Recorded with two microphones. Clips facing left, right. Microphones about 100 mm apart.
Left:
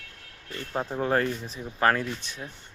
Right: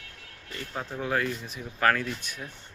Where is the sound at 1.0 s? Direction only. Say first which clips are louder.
Left 3 dB; 40° left (ahead or behind).